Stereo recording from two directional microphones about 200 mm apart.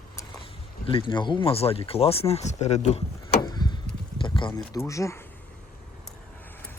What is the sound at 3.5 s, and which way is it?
Chop, 20° left (ahead or behind).